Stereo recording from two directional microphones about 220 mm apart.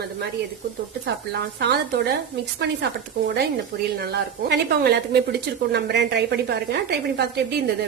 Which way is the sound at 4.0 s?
45° right (ahead or behind).